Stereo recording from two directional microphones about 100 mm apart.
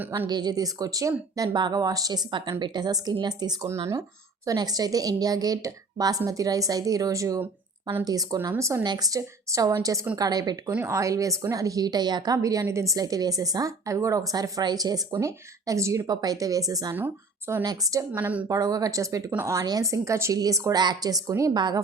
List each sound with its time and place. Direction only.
0.3 s a woman's voice: 45° right (ahead or behind)
8.8 s a woman's voice: 40° right (ahead or behind)
10.8 s a woman's voice: 30° right (ahead or behind)
16.9 s speech: 20° right (ahead or behind)
17.6 s a woman's voice: 40° right (ahead or behind)
18.1 s a woman's voice: 15° right (ahead or behind)
18.4 s a woman's voice: 35° right (ahead or behind)